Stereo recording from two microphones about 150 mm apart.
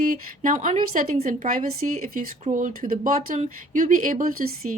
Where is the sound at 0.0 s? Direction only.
70° right (ahead or behind).